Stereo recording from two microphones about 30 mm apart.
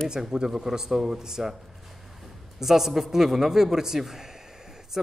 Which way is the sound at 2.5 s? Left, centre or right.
Centre.